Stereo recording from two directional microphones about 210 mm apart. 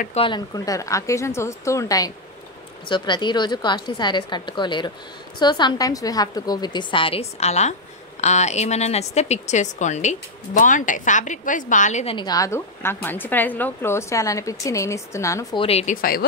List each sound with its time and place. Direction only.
0.0 s a woman's voice: 30° left (ahead or behind)
15.6 s a woman's voice: 30° left (ahead or behind)